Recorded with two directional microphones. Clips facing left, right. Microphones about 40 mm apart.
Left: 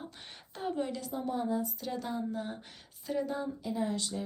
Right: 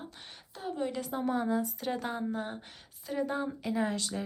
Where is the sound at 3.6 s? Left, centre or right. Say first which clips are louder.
Right 2 dB; right.